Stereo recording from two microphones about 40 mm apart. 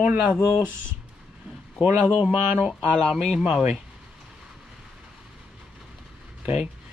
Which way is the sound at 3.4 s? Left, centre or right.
Right.